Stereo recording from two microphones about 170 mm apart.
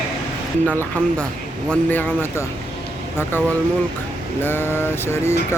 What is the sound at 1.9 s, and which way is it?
Vehicle, 10° left (ahead or behind).